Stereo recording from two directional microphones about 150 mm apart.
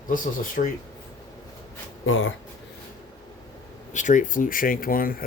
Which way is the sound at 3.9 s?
55° left (ahead or behind).